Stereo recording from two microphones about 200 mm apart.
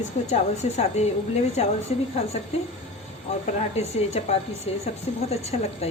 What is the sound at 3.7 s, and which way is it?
A woman's voice, 30° left (ahead or behind).